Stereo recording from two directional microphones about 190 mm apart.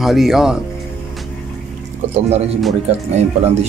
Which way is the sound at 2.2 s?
35° right (ahead or behind).